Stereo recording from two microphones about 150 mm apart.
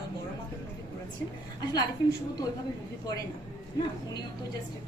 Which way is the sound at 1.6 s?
25° left (ahead or behind).